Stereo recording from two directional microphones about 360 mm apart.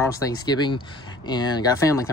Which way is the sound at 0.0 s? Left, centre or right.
Centre.